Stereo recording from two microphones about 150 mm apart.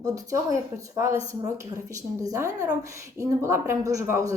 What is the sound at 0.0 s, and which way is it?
A man's voice, 20° right (ahead or behind).